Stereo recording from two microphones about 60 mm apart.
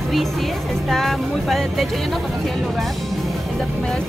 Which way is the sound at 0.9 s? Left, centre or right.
Centre.